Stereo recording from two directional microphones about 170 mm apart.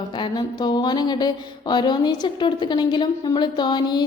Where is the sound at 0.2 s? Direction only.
25° left (ahead or behind).